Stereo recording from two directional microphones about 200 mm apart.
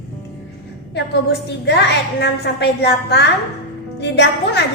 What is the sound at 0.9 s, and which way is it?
A woman's voice, 60° left (ahead or behind).